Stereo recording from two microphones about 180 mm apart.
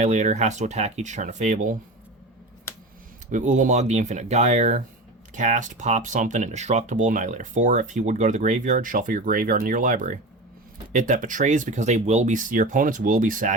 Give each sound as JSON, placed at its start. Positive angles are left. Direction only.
{"t": 0.0, "sound": "speech", "side_deg": -40}
{"t": 3.3, "sound": "speech", "side_deg": -45}